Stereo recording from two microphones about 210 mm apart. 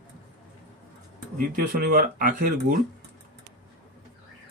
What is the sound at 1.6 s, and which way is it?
Speech, 45° right (ahead or behind).